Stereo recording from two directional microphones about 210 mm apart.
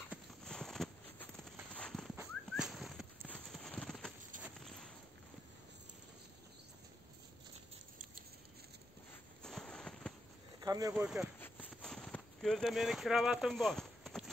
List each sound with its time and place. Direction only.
0.1 s a sound: 5° left (ahead or behind)
3.3 s clip-clop: 5° left (ahead or behind)
9.4 s fireworks: 5° left (ahead or behind)
10.6 s speech: 15° right (ahead or behind)
11.0 s speech: centre (ahead or behind)
11.3 s walk: 10° left (ahead or behind)